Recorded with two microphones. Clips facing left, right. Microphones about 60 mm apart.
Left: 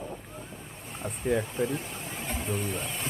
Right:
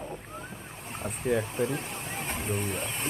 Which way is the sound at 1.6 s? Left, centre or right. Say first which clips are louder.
Even; right.